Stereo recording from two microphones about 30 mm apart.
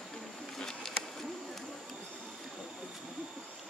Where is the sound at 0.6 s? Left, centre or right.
Centre.